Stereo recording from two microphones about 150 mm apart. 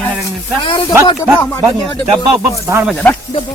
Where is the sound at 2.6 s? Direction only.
20° right (ahead or behind).